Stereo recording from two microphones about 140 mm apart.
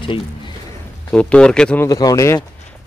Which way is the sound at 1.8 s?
25° left (ahead or behind).